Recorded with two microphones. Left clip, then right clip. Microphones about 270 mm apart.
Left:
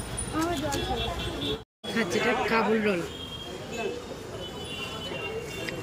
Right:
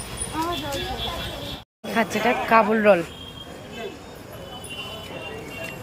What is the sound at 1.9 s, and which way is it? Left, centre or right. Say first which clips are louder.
Speech: right 5 dB; centre.